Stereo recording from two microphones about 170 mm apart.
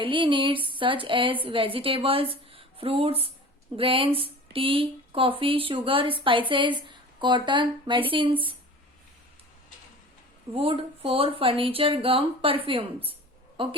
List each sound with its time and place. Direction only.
0.0 s a woman's voice: 30° right (ahead or behind)
10.5 s a woman's voice: 30° right (ahead or behind)